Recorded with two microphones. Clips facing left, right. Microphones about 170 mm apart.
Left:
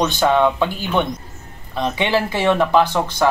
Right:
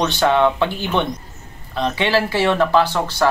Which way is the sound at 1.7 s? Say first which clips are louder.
Even; 15° left (ahead or behind).